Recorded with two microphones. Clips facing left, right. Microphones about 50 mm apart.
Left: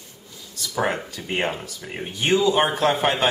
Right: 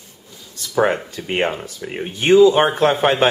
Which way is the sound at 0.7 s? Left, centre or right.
Centre.